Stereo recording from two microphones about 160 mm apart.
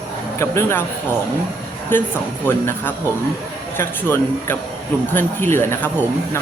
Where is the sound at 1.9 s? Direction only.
15° left (ahead or behind).